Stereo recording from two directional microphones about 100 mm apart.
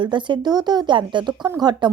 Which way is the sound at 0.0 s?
50° right (ahead or behind).